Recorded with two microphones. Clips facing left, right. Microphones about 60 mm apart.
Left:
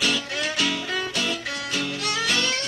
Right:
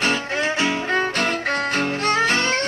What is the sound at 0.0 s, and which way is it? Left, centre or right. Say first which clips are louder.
Music: right 4 dB; right.